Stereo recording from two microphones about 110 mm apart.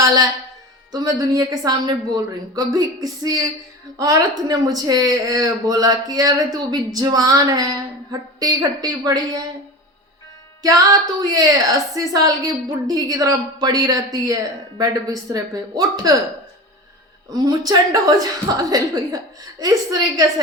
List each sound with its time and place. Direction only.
0.0 s a woman's voice: 35° right (ahead or behind)
11.2 s a woman's voice: 35° right (ahead or behind)
17.2 s a woman's voice: 40° right (ahead or behind)